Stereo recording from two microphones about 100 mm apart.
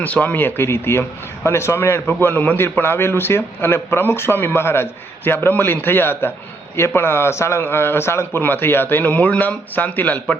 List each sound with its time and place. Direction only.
0.0 s a man's voice: 15° left (ahead or behind)